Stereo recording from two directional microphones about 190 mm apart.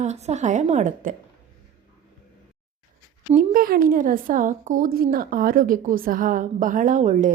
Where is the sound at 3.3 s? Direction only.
50° right (ahead or behind).